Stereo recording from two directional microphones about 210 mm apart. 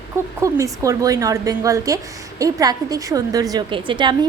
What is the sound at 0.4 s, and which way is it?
A woman's voice, 15° right (ahead or behind).